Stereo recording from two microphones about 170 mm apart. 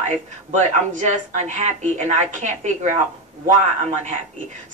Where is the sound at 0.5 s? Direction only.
45° right (ahead or behind).